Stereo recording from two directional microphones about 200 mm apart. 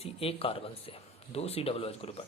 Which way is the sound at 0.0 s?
30° left (ahead or behind).